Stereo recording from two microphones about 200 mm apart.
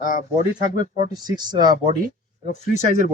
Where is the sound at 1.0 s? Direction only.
20° right (ahead or behind).